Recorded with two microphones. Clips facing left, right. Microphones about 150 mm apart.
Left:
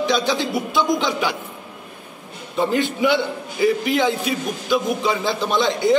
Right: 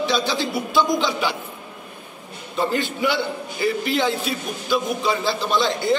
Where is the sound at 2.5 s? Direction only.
20° left (ahead or behind).